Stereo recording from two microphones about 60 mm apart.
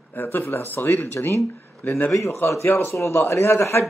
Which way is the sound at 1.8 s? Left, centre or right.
Left.